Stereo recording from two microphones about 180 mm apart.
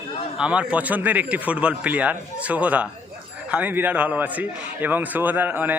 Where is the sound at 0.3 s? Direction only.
5° right (ahead or behind).